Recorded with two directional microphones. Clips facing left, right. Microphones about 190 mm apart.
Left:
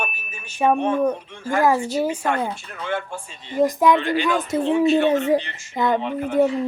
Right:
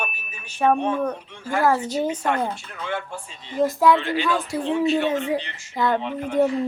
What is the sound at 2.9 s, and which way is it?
Speech, 50° left (ahead or behind).